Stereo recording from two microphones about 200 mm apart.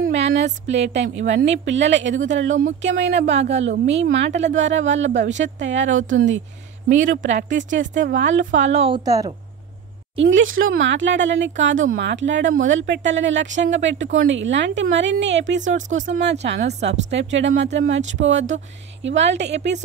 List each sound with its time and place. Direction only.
0.3 s speech: 65° right (ahead or behind)
2.3 s speech: 75° right (ahead or behind)
2.8 s speech: 60° right (ahead or behind)
3.3 s speech: 35° right (ahead or behind)
3.8 s speech: 65° right (ahead or behind)
7.1 s speech: 40° right (ahead or behind)
8.2 s speech: 70° right (ahead or behind)
8.5 s a woman's voice: 35° right (ahead or behind); by 9.3 s 15° right (ahead or behind)
10.1 s speech: 70° right (ahead or behind)
11.9 s speech: 60° right (ahead or behind)